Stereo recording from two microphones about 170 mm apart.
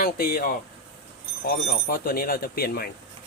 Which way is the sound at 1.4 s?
60° left (ahead or behind).